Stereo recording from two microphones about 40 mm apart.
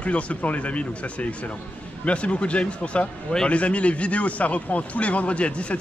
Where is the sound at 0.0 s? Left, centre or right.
Left.